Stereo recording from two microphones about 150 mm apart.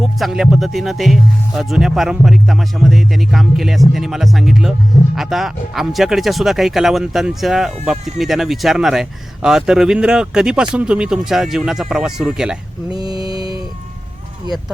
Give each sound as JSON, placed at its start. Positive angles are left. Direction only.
{"t": 0.0, "sound": "speech", "side_deg": 0}
{"t": 13.0, "sound": "mantra", "side_deg": -25}